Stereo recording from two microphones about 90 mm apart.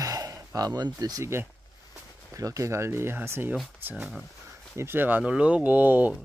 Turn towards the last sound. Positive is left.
turn(degrees=-20)  # may be behind; listen again after turning